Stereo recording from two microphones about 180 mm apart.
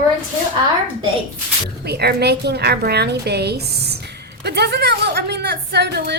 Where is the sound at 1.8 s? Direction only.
65° right (ahead or behind).